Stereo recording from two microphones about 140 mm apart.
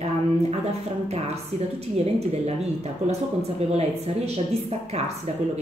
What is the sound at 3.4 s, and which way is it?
Speech, 50° right (ahead or behind).